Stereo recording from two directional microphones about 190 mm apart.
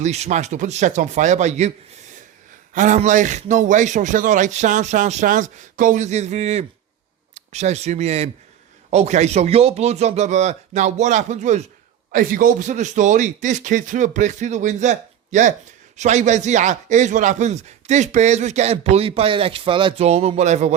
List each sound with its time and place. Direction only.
0.0 s speech: 35° right (ahead or behind)
2.7 s speech: 40° right (ahead or behind)